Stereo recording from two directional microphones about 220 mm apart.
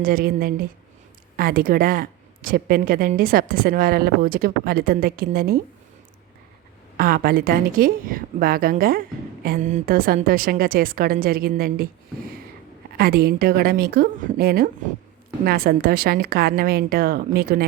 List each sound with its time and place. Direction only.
0.0 s a woman's voice: 40° right (ahead or behind)
6.9 s a woman's voice: 40° right (ahead or behind)
13.0 s a woman's voice: 45° right (ahead or behind)